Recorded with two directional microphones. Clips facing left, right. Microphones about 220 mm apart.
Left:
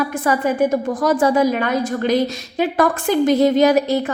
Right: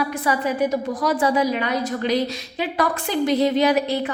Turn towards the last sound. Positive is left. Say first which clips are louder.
# left 4 dB
turn(degrees=45)  # may be behind; listen again after turning